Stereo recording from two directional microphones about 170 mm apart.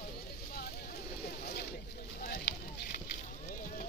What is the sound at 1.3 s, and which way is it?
Boat, 70° left (ahead or behind).